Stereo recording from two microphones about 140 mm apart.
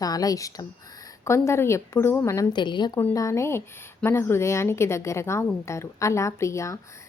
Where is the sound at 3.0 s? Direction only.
20° left (ahead or behind).